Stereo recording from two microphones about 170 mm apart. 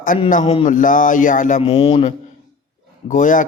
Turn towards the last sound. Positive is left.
turn(degrees=50)  # may be behind; listen again after turning